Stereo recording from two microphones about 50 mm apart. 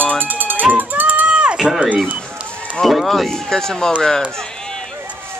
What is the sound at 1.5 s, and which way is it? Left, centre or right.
Speech, centre.